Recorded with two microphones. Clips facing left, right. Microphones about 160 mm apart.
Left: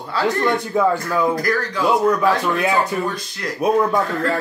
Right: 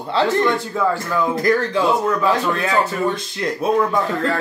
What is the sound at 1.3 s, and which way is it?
Speech, 25° right (ahead or behind).